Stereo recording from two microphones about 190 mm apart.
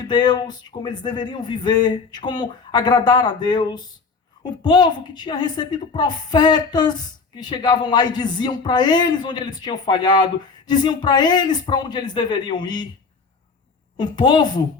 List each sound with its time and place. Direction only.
0.1 s speech: 20° left (ahead or behind)
13.9 s speech: 25° left (ahead or behind)